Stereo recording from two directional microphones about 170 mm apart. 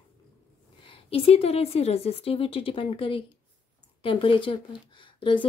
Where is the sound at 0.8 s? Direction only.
30° left (ahead or behind).